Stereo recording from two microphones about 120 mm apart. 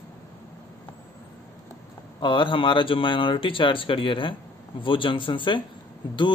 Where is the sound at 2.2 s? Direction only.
45° left (ahead or behind).